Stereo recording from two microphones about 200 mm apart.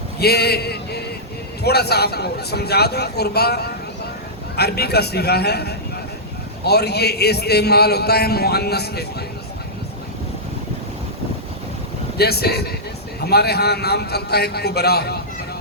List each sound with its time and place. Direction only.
0.2 s a sound: 55° left (ahead or behind)
1.6 s a man's voice: 55° left (ahead or behind)
12.1 s a man's voice: 50° left (ahead or behind)